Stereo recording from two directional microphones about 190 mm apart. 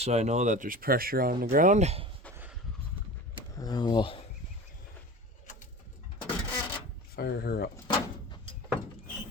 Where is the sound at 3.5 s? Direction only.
20° left (ahead or behind).